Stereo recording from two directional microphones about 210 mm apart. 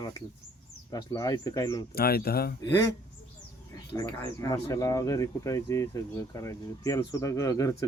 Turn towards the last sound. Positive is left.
turn(degrees=15)  # may be behind; listen again after turning